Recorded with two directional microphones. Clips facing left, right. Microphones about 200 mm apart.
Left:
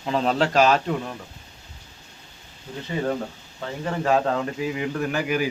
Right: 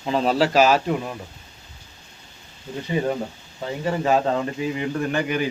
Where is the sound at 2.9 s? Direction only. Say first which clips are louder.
Right 1 dB; 15° right (ahead or behind).